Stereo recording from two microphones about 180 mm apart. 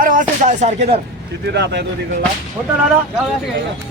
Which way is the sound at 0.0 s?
45° right (ahead or behind).